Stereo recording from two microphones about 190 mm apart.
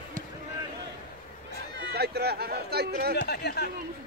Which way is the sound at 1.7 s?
55° right (ahead or behind).